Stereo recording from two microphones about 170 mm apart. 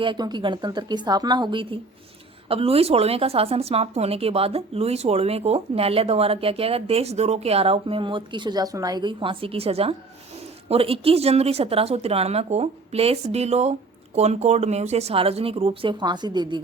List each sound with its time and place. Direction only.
0.0 s a woman's voice: 25° right (ahead or behind)